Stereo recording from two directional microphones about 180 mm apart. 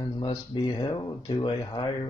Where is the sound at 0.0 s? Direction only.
25° left (ahead or behind).